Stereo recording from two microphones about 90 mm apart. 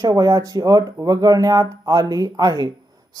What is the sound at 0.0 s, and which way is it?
Speech, 40° right (ahead or behind).